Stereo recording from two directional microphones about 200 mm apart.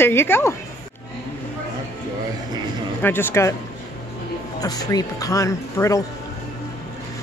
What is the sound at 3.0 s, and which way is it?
Speech, 10° left (ahead or behind).